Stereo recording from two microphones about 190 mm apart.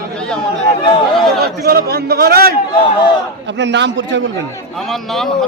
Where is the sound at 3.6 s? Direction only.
70° right (ahead or behind).